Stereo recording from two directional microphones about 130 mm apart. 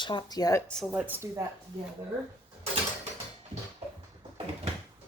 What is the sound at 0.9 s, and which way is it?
Speech, 15° right (ahead or behind).